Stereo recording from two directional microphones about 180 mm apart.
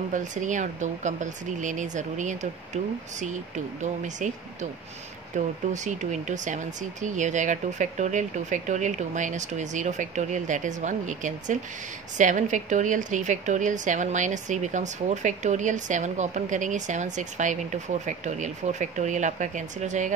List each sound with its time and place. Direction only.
0.1 s a woman's voice: 45° right (ahead or behind)